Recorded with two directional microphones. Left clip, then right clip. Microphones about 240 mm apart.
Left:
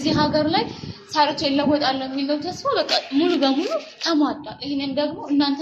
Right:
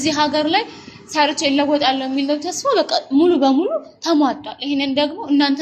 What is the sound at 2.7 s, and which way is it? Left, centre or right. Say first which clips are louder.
A woman's voice: right 4 dB; right.